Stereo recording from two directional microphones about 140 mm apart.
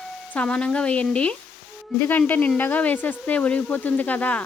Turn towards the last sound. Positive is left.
turn(degrees=10)  # may be behind; listen again after turning